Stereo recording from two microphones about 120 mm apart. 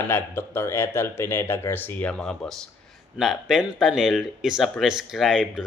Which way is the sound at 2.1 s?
5° left (ahead or behind).